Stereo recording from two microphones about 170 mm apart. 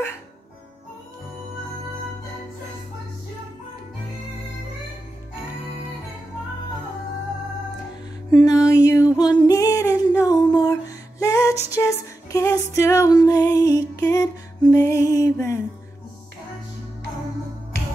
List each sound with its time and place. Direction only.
8.3 s music: 20° left (ahead or behind)